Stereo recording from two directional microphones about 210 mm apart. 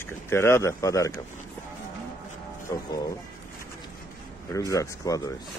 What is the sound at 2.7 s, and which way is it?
Speech, 15° left (ahead or behind).